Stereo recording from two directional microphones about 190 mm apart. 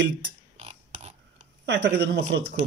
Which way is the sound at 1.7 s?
60° right (ahead or behind).